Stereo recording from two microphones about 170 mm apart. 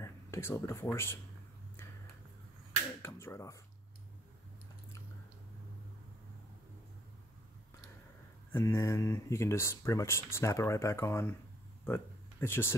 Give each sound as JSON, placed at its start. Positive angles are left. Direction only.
{"t": 0.0, "sound": "speech", "side_deg": 15}
{"t": 3.2, "sound": "speech", "side_deg": 15}
{"t": 8.5, "sound": "speech", "side_deg": 15}
{"t": 11.8, "sound": "a sound", "side_deg": 10}